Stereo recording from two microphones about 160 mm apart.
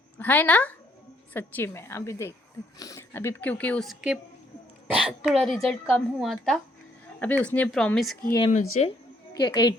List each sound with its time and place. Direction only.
0.2 s a woman's voice: 10° left (ahead or behind)
8.4 s speech: 45° left (ahead or behind)
9.3 s a woman's voice: 25° left (ahead or behind)